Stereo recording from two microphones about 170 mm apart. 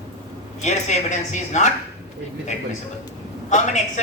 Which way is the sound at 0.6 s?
45° left (ahead or behind).